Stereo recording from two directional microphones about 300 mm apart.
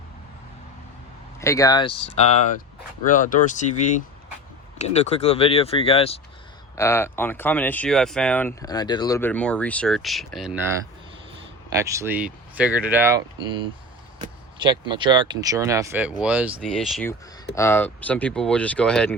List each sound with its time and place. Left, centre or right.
1.4 s speech: centre
11.7 s speech: centre